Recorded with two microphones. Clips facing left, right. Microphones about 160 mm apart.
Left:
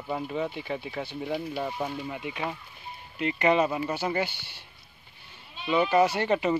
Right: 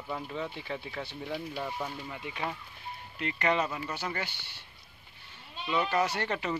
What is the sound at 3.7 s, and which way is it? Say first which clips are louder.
Speech: left 7 dB; 30° left (ahead or behind).